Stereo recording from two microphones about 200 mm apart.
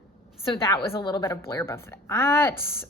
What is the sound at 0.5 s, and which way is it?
A woman's voice, 20° left (ahead or behind).